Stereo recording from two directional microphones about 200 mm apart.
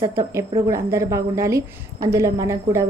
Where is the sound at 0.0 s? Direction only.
15° right (ahead or behind).